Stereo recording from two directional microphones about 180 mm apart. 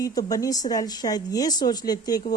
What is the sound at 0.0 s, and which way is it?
A woman's voice, 20° left (ahead or behind).